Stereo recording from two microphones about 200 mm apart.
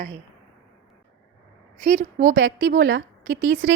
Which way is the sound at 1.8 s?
40° right (ahead or behind).